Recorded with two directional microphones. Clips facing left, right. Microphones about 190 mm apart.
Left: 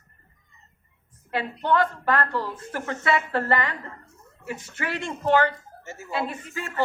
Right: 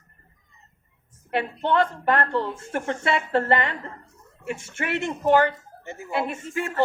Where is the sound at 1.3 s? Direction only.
25° right (ahead or behind).